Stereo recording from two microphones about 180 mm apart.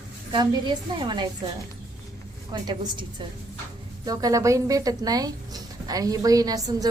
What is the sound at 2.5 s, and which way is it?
Speech, 25° right (ahead or behind).